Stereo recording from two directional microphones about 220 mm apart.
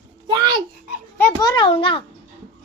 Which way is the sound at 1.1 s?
15° left (ahead or behind).